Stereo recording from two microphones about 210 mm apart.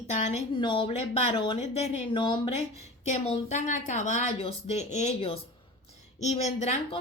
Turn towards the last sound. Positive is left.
turn(degrees=30)  # may be behind; listen again after turning